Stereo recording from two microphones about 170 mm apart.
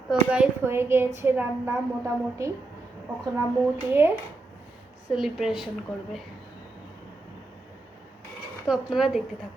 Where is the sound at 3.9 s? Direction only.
15° right (ahead or behind).